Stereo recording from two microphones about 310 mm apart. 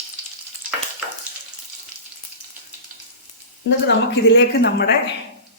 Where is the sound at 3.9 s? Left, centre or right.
Left.